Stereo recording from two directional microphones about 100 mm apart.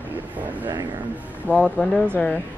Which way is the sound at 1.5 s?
5° left (ahead or behind).